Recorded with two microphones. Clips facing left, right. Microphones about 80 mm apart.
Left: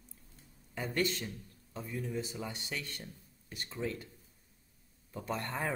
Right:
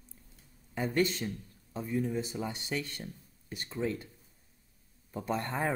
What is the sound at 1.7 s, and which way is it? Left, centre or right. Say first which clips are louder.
Speech: right 6 dB; right.